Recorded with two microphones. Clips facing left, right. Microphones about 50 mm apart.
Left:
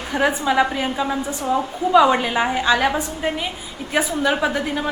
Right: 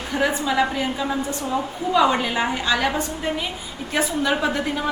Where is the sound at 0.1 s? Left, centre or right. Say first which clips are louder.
Left 3 dB; centre.